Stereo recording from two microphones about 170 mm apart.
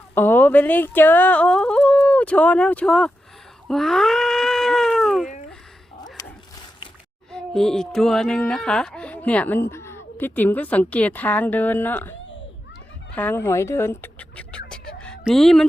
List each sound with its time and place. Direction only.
0.1 s speech: 15° left (ahead or behind)
3.7 s cat: centre (ahead or behind)
7.3 s speech: 5° left (ahead or behind)
13.1 s speech: 10° left (ahead or behind)
14.7 s a sound: 5° left (ahead or behind)
15.2 s speech: centre (ahead or behind)